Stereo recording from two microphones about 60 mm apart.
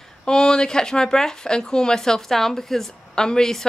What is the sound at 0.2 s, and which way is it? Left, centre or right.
Speech, centre.